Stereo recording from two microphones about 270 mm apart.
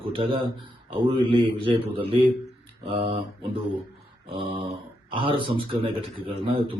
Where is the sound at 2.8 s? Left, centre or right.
Centre.